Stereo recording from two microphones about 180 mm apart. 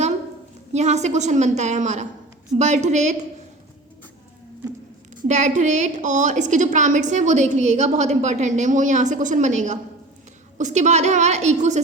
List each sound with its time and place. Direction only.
0.7 s a woman's voice: 40° right (ahead or behind)
5.3 s a woman's voice: 40° right (ahead or behind)